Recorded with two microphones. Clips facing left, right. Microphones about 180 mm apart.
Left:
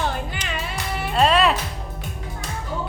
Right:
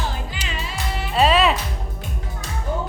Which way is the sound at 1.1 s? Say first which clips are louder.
Right 1 dB; centre (ahead or behind).